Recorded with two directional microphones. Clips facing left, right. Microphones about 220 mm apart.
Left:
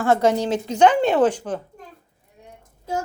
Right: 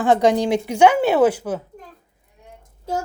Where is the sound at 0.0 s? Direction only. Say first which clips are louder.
Right 2 dB; 15° right (ahead or behind).